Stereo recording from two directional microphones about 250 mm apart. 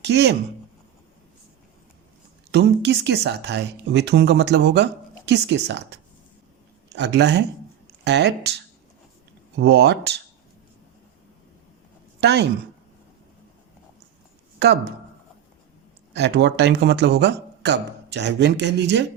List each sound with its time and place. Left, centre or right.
0.0 s speech: right
2.5 s speech: right
9.6 s speech: right
12.2 s speech: right
16.1 s speech: right